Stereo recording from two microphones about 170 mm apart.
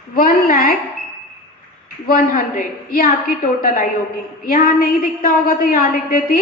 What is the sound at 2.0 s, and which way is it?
A woman's voice, 55° left (ahead or behind).